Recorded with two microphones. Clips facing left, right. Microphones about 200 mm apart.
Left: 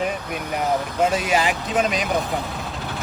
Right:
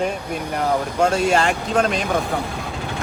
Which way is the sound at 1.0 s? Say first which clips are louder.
Right 3 dB; 5° left (ahead or behind).